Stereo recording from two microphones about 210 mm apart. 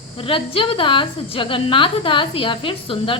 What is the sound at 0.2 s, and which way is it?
A woman's voice, 25° left (ahead or behind).